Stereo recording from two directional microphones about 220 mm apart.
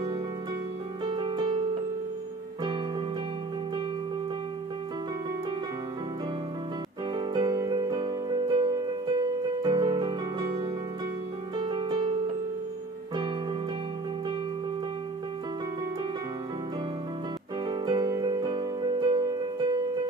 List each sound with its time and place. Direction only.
1.0 s music: 20° right (ahead or behind)
7.2 s music: 20° right (ahead or behind)
17.6 s music: 20° right (ahead or behind)